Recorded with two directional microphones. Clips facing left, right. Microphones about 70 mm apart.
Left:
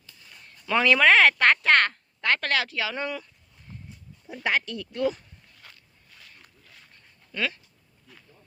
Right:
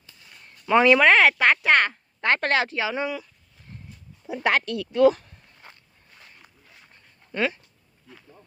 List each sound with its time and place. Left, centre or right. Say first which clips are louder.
0.6 s speech: right 5 dB; right
1.0 s speech: right 1 dB; centre
2.2 s speech: right 3 dB; right
2.9 s speech: right 3 dB; centre
4.4 s speech: right 4 dB; right
5.5 s a sound: right 4 dB; right
7.3 s speech: right 4 dB; right